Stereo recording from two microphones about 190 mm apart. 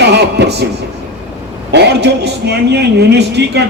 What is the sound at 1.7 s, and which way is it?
A man's voice, 60° right (ahead or behind).